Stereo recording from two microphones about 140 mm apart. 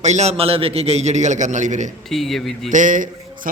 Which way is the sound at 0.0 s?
55° right (ahead or behind).